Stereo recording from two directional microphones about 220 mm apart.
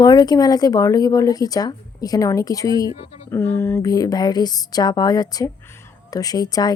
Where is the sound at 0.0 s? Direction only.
15° left (ahead or behind).